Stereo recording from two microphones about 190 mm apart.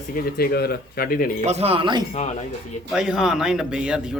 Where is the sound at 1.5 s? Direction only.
30° right (ahead or behind).